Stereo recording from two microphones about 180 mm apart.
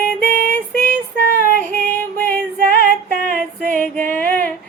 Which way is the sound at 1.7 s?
10° left (ahead or behind).